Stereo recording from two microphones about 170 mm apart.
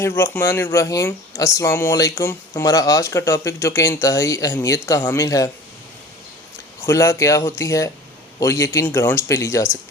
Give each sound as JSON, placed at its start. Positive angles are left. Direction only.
{"t": 0.2, "sound": "speech", "side_deg": 15}
{"t": 6.8, "sound": "speech", "side_deg": 15}